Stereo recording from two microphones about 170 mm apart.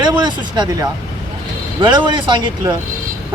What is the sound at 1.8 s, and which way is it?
Speech, 25° right (ahead or behind).